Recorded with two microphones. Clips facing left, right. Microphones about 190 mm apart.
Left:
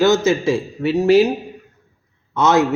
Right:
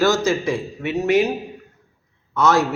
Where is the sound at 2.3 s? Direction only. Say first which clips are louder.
Left 2 dB; 20° left (ahead or behind).